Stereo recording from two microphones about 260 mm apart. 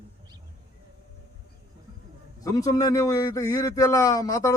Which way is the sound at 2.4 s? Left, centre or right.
Centre.